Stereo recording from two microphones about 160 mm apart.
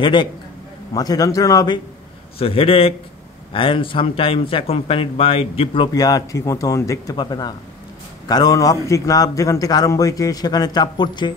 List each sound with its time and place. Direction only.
0.0 s a man's voice: 30° left (ahead or behind)
2.3 s speech: 35° left (ahead or behind)
5.9 s a man's voice: 25° left (ahead or behind)